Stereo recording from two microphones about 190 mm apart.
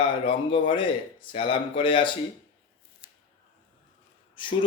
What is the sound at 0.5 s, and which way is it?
Speech, 25° left (ahead or behind).